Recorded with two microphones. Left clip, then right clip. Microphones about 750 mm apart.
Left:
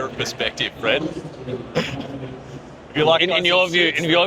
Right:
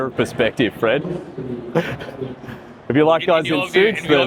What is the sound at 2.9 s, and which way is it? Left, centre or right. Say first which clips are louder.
Speech: right 2 dB; right.